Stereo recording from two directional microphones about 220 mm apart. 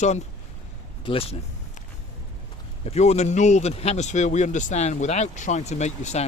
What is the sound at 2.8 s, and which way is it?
Speech, 30° left (ahead or behind).